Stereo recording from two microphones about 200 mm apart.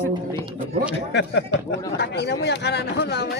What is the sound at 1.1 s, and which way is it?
Speech, 60° left (ahead or behind).